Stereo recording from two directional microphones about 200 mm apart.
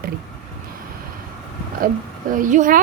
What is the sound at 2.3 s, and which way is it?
Speech, 40° right (ahead or behind).